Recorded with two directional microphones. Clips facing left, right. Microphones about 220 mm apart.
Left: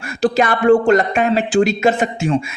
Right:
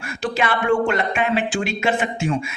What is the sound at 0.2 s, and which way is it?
Speech, 40° left (ahead or behind).